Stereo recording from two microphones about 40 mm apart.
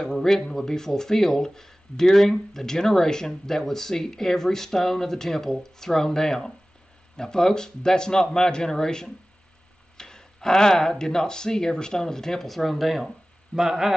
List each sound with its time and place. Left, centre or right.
0.0 s speech: centre
13.6 s a man's voice: centre